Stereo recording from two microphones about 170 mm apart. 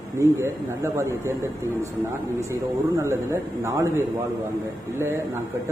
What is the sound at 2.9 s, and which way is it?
Speech, 15° right (ahead or behind).